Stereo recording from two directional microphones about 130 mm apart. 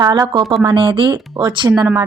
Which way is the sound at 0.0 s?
30° right (ahead or behind).